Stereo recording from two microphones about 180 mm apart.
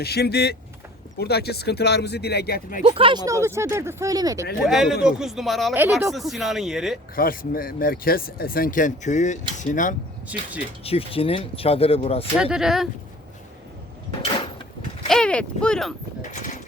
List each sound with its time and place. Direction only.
0.0 s speech: 60° left (ahead or behind)
2.8 s speech: 30° right (ahead or behind)
4.6 s speech: centre (ahead or behind)
7.2 s speech: 55° left (ahead or behind)
10.8 s speech: 30° left (ahead or behind)
12.4 s speech: 5° right (ahead or behind)
15.0 s speech: 5° left (ahead or behind)